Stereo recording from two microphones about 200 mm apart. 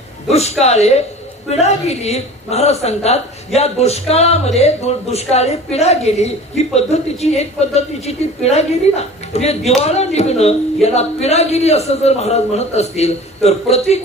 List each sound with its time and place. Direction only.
0.3 s speech: 30° left (ahead or behind)